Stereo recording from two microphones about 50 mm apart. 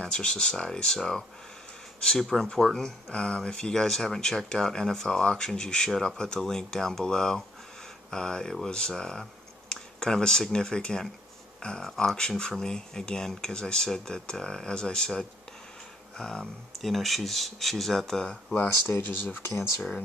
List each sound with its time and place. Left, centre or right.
0.0 s speech: centre
16.7 s speech: centre
19.0 s speech: left